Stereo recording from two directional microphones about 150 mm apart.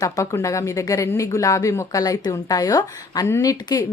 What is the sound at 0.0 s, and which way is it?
Speech, 20° left (ahead or behind).